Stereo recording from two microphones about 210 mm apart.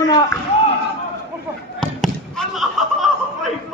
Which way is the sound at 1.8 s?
Centre (ahead or behind).